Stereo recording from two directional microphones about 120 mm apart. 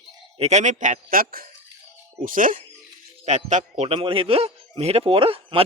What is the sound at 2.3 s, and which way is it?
Speech, 90° right.